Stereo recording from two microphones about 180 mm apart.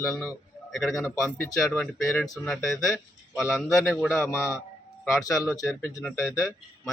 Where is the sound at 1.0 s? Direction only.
15° left (ahead or behind).